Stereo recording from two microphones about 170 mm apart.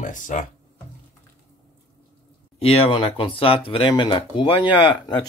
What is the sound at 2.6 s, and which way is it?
Speech, 35° left (ahead or behind).